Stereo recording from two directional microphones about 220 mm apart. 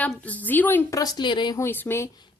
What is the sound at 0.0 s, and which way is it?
A woman's voice, 5° left (ahead or behind).